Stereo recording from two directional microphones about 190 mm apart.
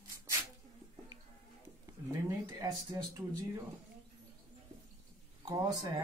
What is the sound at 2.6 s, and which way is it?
Speech, 20° right (ahead or behind).